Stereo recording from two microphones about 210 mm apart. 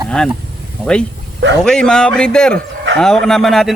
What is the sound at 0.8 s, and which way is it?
Speech, 5° left (ahead or behind).